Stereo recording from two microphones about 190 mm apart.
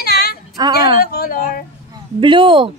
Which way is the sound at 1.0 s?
50° left (ahead or behind).